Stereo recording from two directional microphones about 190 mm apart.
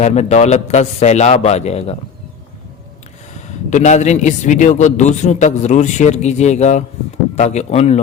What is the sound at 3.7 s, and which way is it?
A man's voice, 40° left (ahead or behind).